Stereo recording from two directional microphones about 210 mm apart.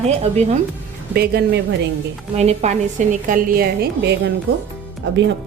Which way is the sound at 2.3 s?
30° right (ahead or behind).